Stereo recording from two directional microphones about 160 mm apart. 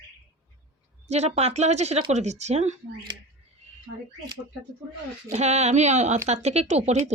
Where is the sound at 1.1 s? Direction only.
45° right (ahead or behind).